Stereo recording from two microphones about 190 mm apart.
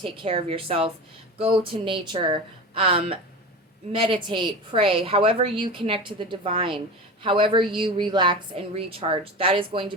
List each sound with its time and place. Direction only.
0.0 s a woman's voice: 30° right (ahead or behind)